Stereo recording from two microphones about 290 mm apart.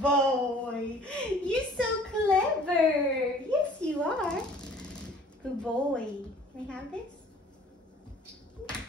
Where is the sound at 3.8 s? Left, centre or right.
Centre.